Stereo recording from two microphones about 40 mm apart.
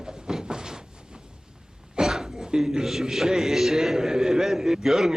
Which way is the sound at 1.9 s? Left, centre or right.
Centre.